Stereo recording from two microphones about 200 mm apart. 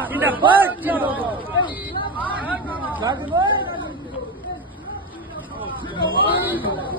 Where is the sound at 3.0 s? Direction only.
20° right (ahead or behind).